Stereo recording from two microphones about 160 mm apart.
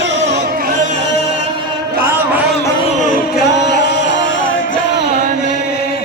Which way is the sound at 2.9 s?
50° left (ahead or behind).